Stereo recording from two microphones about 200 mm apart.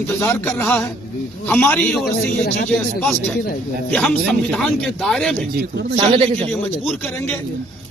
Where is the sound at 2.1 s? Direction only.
50° left (ahead or behind).